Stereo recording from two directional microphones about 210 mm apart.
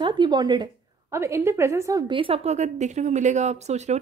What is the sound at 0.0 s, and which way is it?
A woman's voice, 20° right (ahead or behind).